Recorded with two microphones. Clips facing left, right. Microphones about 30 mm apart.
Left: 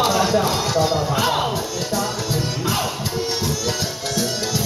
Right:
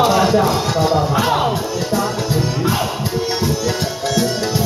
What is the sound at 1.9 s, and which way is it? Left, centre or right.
Music, right.